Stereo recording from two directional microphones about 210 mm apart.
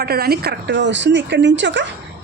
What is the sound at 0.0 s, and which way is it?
Speech, 50° right (ahead or behind).